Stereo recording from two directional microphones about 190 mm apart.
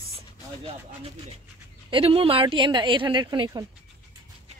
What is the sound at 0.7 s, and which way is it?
A woman's voice, 30° right (ahead or behind).